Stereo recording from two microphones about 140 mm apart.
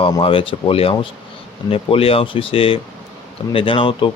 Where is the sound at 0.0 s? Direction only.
40° left (ahead or behind).